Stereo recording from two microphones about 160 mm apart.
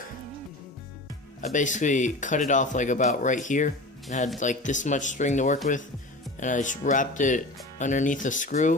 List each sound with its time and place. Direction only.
1.4 s speech: 50° left (ahead or behind)